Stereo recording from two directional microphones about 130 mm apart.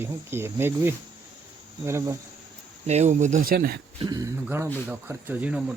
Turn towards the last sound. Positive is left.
turn(degrees=-15)  # may be behind; listen again after turning